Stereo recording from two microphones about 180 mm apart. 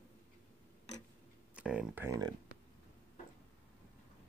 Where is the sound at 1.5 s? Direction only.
5° right (ahead or behind).